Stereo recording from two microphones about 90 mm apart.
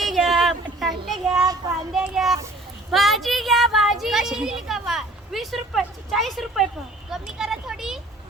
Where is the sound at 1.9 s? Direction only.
5° right (ahead or behind).